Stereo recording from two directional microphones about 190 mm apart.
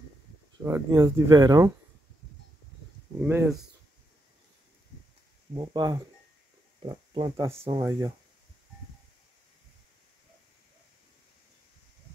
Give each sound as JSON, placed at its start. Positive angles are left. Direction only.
{"t": 0.7, "sound": "speech", "side_deg": -15}
{"t": 3.2, "sound": "speech", "side_deg": -10}
{"t": 5.5, "sound": "speech", "side_deg": -20}